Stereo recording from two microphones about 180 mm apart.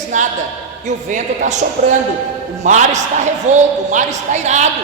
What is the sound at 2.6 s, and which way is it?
Speech, 40° right (ahead or behind).